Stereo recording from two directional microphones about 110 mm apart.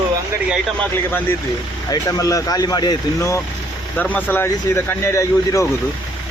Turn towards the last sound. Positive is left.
turn(degrees=30)  # may be behind; listen again after turning